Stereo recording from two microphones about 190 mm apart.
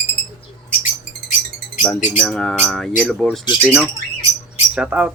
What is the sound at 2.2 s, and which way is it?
Speech, 5° left (ahead or behind).